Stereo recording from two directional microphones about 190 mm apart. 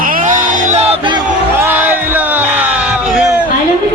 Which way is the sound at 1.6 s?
10° right (ahead or behind).